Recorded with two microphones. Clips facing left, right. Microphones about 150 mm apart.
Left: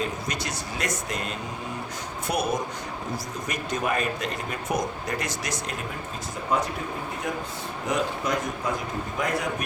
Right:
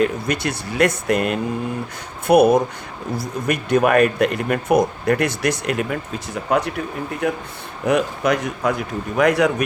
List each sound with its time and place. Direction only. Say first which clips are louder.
0.0 s speech: right 10 dB; 60° right (ahead or behind)
7.2 s a man's voice: right 7 dB; 65° right (ahead or behind)